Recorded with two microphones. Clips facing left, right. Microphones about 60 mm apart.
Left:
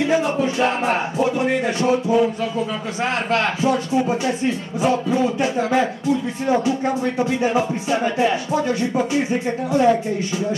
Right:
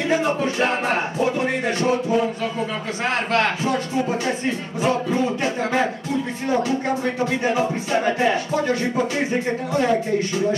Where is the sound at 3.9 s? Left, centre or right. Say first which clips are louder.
Left 3 dB; left.